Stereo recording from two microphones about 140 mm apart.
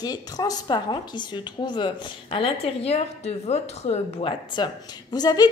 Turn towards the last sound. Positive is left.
turn(degrees=30)  # may be behind; listen again after turning